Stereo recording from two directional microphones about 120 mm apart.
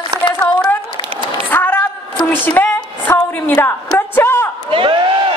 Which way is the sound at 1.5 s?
15° left (ahead or behind).